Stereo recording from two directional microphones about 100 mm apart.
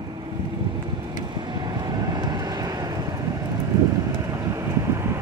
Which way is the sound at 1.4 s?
45° right (ahead or behind).